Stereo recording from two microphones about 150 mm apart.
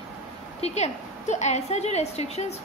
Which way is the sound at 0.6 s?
45° left (ahead or behind).